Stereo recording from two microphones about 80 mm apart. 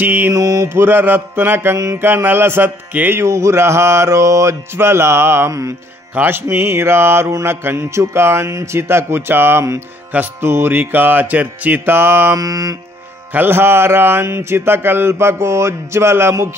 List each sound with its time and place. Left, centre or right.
0.0 s music: right
0.3 s mantra: right
0.8 s music: right
6.1 s music: right
12.4 s mantra: right
13.3 s music: right